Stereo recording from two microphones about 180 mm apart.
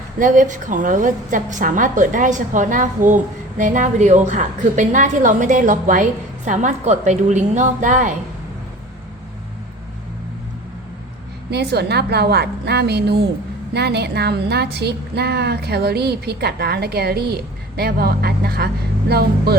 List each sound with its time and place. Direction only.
0.2 s a woman's voice: 45° right (ahead or behind)
11.5 s speech: 65° right (ahead or behind)